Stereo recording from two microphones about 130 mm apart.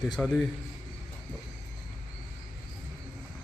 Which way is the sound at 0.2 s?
10° left (ahead or behind).